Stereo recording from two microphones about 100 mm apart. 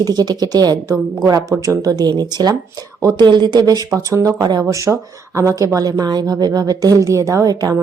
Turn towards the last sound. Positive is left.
turn(degrees=-40)  # may be behind; listen again after turning